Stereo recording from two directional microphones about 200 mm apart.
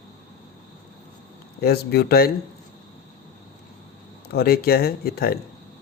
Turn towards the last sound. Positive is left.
turn(degrees=50)  # may be behind; listen again after turning